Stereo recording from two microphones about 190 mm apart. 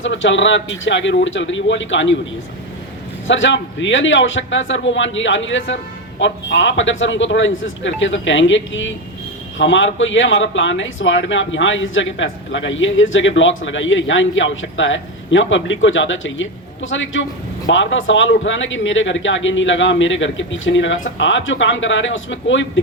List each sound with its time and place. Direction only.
0.0 s speech: 75° left (ahead or behind)
3.2 s speech: 80° left
17.7 s speech: 80° left